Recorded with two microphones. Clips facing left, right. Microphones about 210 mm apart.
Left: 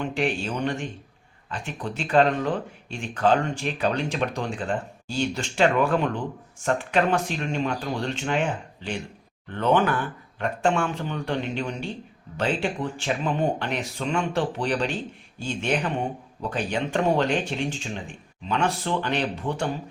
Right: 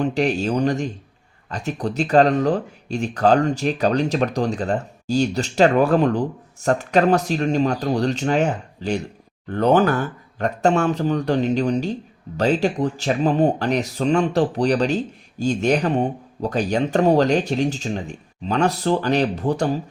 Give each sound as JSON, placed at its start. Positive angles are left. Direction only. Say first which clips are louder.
{"t": 0.0, "sound": "speech", "louder": "right 6 dB", "side_deg": -40}